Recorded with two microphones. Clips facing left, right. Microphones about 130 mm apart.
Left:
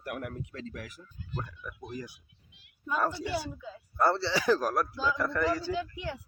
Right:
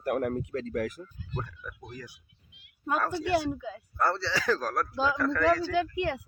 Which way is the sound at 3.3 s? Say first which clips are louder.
Right 7 dB; 70° right (ahead or behind).